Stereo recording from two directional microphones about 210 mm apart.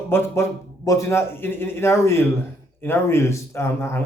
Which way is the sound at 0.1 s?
10° left (ahead or behind).